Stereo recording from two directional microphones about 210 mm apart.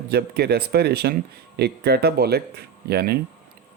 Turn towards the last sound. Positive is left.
turn(degrees=-50)  # may be behind; listen again after turning